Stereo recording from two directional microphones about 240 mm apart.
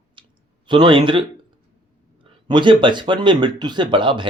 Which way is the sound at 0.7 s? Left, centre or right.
Centre.